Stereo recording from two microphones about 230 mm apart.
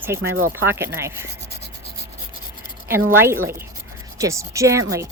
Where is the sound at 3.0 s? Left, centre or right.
Centre.